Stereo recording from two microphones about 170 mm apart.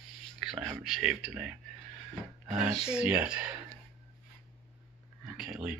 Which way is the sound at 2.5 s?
5° right (ahead or behind).